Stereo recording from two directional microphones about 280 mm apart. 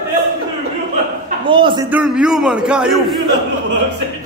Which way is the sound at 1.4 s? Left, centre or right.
Centre.